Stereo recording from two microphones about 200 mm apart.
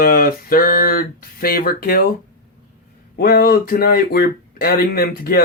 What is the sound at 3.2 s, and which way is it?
Speech, 50° left (ahead or behind).